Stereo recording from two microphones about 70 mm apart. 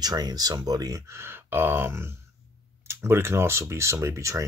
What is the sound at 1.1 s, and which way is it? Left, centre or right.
Speech, right.